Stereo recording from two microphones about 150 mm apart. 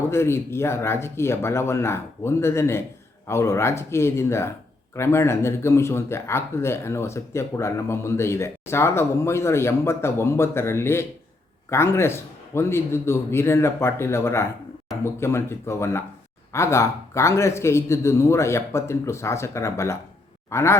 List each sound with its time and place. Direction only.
0.1 s speech: 15° left (ahead or behind)